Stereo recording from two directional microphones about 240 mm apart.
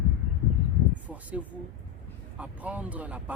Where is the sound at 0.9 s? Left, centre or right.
Centre.